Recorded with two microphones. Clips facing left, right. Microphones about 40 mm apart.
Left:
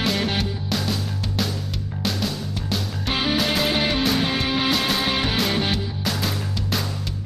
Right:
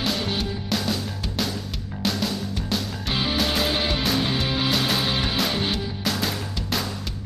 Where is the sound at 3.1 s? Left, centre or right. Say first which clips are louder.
Left 3 dB; left.